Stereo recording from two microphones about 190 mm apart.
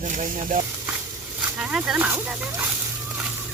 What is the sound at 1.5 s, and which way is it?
Speech, 5° right (ahead or behind).